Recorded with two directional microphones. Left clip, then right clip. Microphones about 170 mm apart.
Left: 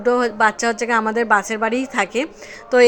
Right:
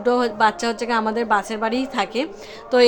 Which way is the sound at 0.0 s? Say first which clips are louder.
Left 2 dB; 15° left (ahead or behind).